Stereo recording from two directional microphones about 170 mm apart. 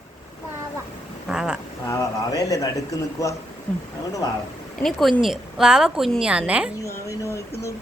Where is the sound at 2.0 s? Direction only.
20° left (ahead or behind).